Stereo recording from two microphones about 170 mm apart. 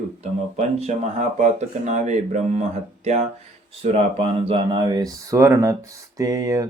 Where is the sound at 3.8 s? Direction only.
35° right (ahead or behind).